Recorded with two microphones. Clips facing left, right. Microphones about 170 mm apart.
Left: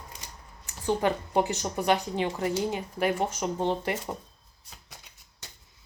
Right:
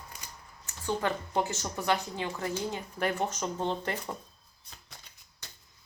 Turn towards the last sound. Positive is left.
turn(degrees=20)  # may be behind; listen again after turning